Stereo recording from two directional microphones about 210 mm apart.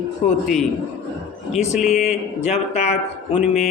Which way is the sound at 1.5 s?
Centre (ahead or behind).